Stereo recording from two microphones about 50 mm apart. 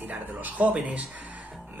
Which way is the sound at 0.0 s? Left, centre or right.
Right.